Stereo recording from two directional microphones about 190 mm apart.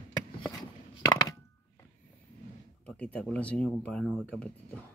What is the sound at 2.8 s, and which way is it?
Speech, 5° left (ahead or behind).